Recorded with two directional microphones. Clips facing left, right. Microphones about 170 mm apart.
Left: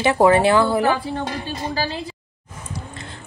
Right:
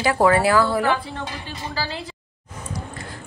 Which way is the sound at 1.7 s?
20° left (ahead or behind).